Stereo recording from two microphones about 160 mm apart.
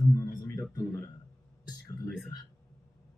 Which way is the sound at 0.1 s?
20° left (ahead or behind).